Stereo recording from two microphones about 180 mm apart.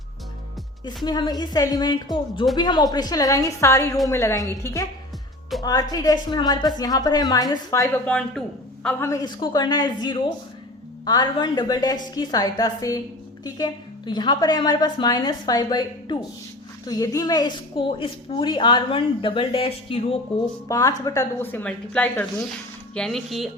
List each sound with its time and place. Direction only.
1.0 s a woman's voice: 25° left (ahead or behind)
8.0 s speech: 5° left (ahead or behind)
9.0 s a woman's voice: 20° left (ahead or behind)
20.7 s speech: 20° left (ahead or behind); by 23.5 s centre (ahead or behind)